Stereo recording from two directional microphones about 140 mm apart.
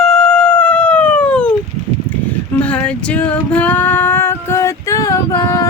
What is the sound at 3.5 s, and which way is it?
Female singing, 10° left (ahead or behind).